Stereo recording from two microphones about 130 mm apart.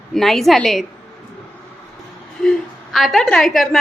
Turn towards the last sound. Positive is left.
turn(degrees=0)  # may be behind; listen again after turning